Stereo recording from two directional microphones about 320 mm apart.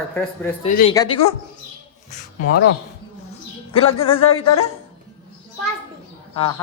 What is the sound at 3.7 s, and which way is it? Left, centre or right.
Speech, centre.